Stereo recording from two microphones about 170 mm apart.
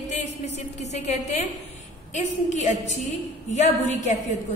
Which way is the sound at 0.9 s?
40° left (ahead or behind).